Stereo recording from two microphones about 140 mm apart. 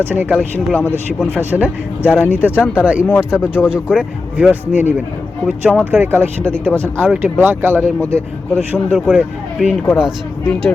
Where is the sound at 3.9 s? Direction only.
10° right (ahead or behind).